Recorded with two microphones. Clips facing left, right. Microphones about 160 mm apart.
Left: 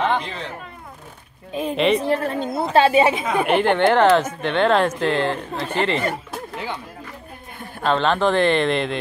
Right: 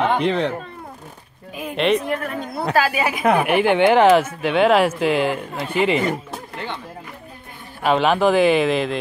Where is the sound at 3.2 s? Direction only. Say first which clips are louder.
Right 4 dB; 65° right (ahead or behind).